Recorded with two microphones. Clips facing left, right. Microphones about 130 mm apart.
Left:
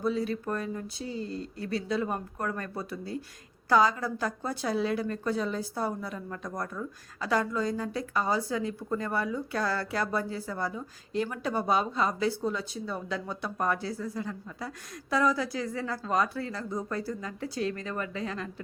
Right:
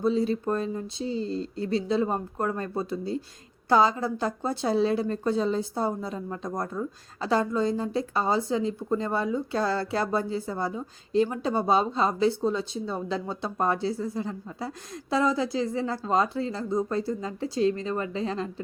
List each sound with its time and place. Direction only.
0.0 s a woman's voice: 25° right (ahead or behind)